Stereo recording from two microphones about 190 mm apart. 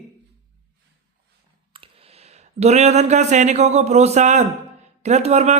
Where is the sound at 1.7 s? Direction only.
30° right (ahead or behind).